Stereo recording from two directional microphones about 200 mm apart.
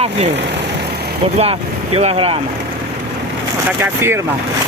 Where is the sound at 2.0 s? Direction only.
30° right (ahead or behind).